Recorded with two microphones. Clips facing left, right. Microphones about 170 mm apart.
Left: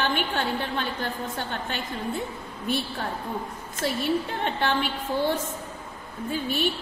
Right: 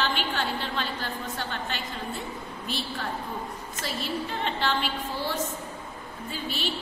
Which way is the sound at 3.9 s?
55° left (ahead or behind).